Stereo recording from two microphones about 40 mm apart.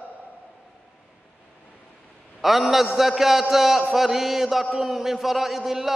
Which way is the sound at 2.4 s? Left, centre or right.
Centre.